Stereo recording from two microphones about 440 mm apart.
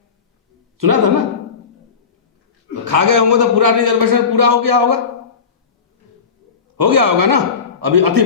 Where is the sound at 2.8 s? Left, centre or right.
Right.